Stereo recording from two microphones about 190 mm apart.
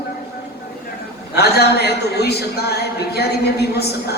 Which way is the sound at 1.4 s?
55° left (ahead or behind).